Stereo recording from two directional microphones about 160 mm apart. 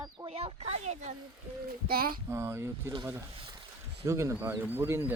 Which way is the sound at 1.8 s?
70° right (ahead or behind).